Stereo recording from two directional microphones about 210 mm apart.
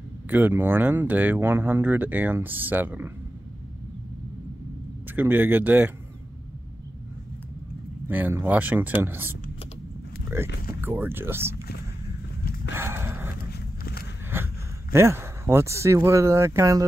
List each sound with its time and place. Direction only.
0.3 s speech: 10° right (ahead or behind)
5.1 s speech: 10° right (ahead or behind)
8.1 s speech: 10° right (ahead or behind)
10.3 s speech: 10° right (ahead or behind)
12.7 s horse: 10° right (ahead or behind)
13.5 s walk: 45° left (ahead or behind)
14.3 s speech: 10° right (ahead or behind)